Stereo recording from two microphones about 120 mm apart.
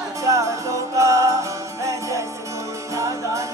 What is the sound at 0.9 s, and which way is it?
Jingle bell, 25° right (ahead or behind).